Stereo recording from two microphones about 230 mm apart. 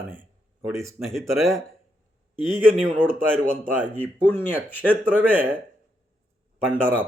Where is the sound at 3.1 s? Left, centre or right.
Centre.